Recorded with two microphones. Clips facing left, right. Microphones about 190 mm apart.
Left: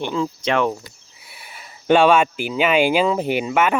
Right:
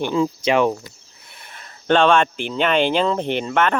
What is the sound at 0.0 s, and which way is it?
Speech, 10° right (ahead or behind).